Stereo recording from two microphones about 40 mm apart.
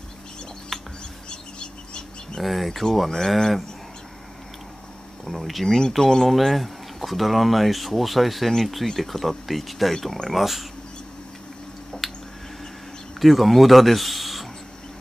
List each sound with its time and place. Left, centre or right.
1.3 s bird: left
2.4 s speech: centre
5.2 s speech: centre
5.8 s speech: centre
6.2 s speech: centre
12.0 s a sound: centre
13.2 s a man's voice: centre